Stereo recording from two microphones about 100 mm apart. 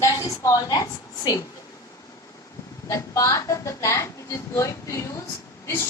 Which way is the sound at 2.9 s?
35° left (ahead or behind).